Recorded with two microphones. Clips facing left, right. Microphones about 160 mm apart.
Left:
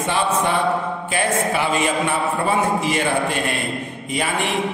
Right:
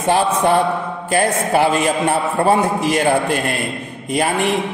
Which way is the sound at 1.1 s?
45° right (ahead or behind).